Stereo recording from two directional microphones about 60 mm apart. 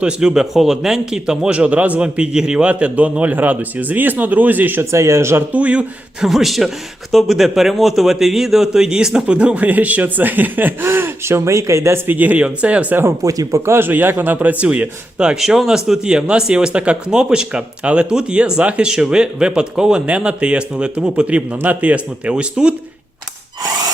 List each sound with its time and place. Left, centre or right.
0.0 s a man's voice: centre; by 4.9 s right
4.9 s speech: right
5.5 s a man's voice: right
6.1 s a man's voice: centre; by 11.9 s right
12.0 s a man's voice: right
13.2 s speech: right
13.7 s speech: right
14.3 s a man's voice: right
15.4 s speech: centre